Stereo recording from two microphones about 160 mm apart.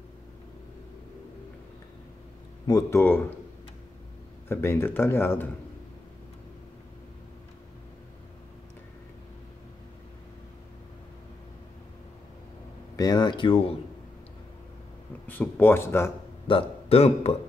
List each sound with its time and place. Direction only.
2.6 s speech: 20° left (ahead or behind)
4.5 s speech: 15° left (ahead or behind)
12.9 s speech: 25° left (ahead or behind)
15.2 s speech: 10° left (ahead or behind)
16.4 s speech: 35° left (ahead or behind)